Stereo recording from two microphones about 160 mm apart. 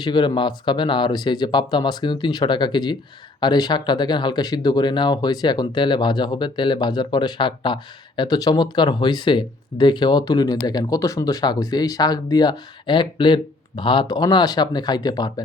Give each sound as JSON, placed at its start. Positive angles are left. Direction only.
{"t": 0.0, "sound": "speech", "side_deg": 30}